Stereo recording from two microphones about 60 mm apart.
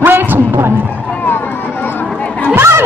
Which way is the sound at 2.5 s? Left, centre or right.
Right.